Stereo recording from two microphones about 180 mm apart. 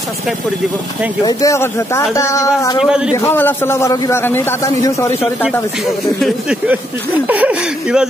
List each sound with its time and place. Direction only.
1.2 s a man's voice: 15° left (ahead or behind)
7.2 s speech: 10° right (ahead or behind)